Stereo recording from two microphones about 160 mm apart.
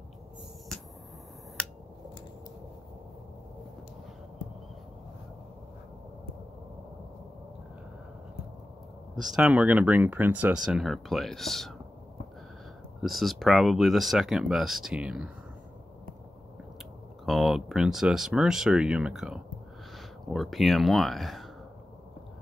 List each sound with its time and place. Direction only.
9.1 s speech: 5° right (ahead or behind)
13.0 s speech: centre (ahead or behind)
17.3 s speech: centre (ahead or behind)